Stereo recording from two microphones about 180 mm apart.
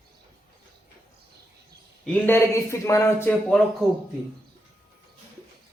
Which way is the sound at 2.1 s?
10° left (ahead or behind).